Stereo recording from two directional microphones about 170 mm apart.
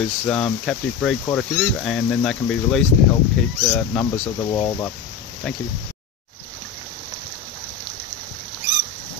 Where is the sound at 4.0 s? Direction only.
20° left (ahead or behind).